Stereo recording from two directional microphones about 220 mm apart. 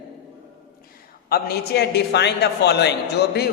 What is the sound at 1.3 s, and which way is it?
A man's voice, 45° left (ahead or behind).